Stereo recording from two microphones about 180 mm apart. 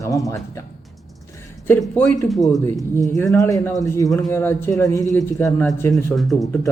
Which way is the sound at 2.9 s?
15° left (ahead or behind).